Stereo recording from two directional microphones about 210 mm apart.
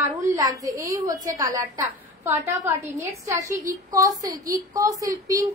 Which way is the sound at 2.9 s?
15° right (ahead or behind).